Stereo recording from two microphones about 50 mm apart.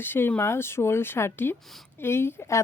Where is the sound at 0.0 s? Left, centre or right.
Left.